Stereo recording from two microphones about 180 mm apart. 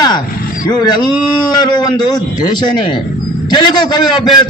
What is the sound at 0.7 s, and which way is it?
A man's voice, 25° left (ahead or behind).